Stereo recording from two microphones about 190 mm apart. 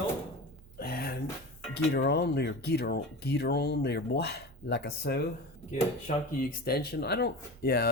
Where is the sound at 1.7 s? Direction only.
60° left (ahead or behind).